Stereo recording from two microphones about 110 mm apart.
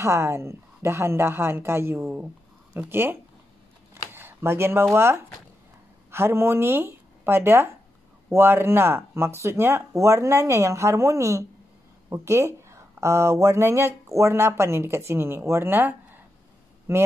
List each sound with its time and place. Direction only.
0.0 s speech: 25° right (ahead or behind)
3.9 s a sound: 20° right (ahead or behind)
4.9 s speech: 20° right (ahead or behind)